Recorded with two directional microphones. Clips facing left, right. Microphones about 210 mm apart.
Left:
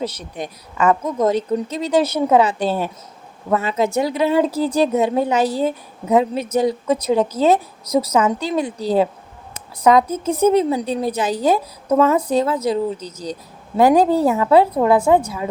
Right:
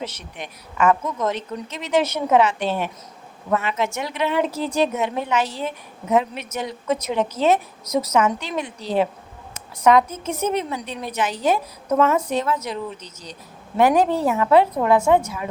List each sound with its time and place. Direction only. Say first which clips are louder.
0.0 s a woman's voice: left 6 dB; 35° left (ahead or behind)